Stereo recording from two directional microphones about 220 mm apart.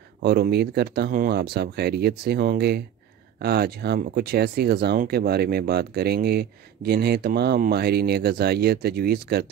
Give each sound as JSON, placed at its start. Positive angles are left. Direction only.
{"t": 0.2, "sound": "speech", "side_deg": -45}